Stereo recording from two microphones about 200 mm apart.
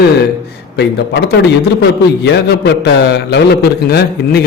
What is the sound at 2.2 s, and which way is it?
A man's voice, 55° left (ahead or behind).